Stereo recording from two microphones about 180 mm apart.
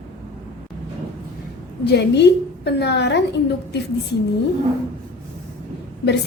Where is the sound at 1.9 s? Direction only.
70° left (ahead or behind).